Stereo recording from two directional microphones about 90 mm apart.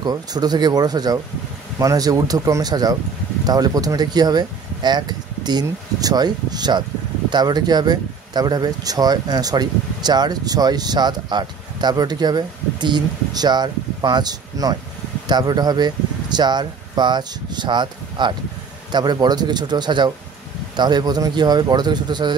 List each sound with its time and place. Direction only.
0.0 s speech: 45° right (ahead or behind)